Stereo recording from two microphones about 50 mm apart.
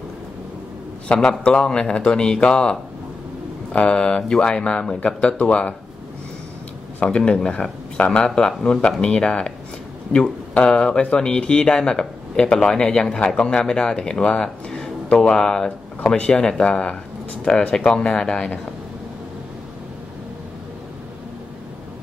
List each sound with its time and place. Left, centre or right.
1.4 s a man's voice: centre
7.0 s a man's voice: centre
10.1 s speech: centre
10.5 s a man's voice: centre
16.0 s speech: left